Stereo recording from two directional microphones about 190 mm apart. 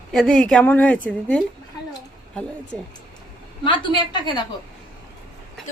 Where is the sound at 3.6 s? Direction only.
25° left (ahead or behind).